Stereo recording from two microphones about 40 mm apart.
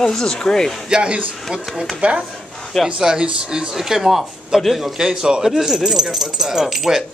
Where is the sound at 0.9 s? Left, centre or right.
Right.